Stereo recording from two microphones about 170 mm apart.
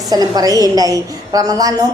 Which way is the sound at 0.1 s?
20° right (ahead or behind).